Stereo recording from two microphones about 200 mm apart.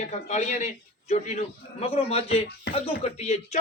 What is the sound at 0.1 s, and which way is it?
A man's voice, 35° left (ahead or behind).